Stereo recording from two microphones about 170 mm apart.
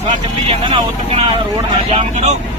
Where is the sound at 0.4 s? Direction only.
30° right (ahead or behind).